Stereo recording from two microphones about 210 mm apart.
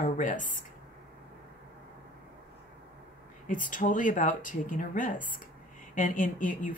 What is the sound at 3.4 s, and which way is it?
Speech, 40° left (ahead or behind).